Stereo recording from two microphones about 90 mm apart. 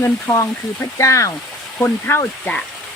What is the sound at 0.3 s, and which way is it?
Speech, 35° left (ahead or behind).